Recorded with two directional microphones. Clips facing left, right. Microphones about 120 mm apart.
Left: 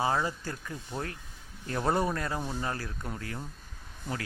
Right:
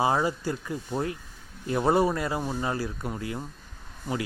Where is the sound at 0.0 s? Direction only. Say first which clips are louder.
Right 5 dB; 15° right (ahead or behind).